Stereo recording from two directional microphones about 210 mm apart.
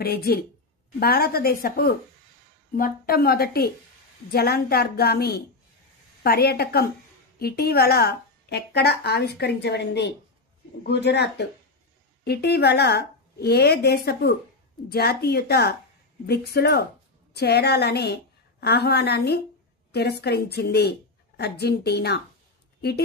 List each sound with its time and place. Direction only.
0.0 s a woman's voice: 50° left (ahead or behind)